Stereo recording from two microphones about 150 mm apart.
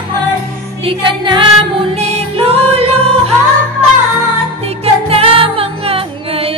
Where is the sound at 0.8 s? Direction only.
35° right (ahead or behind).